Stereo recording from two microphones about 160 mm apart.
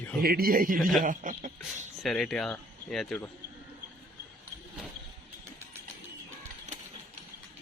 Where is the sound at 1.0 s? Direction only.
55° right (ahead or behind).